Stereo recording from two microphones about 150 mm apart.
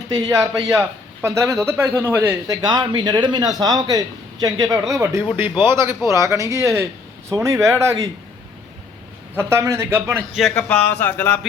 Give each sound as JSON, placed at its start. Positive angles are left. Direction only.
{"t": 0.1, "sound": "a man's voice", "side_deg": -20}
{"t": 2.6, "sound": "a man's voice", "side_deg": -30}
{"t": 9.3, "sound": "speech", "side_deg": -15}
{"t": 10.3, "sound": "speech", "side_deg": 5}